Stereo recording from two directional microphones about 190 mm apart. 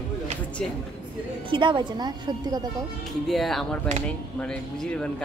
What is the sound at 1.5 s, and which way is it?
A woman's voice, 25° right (ahead or behind).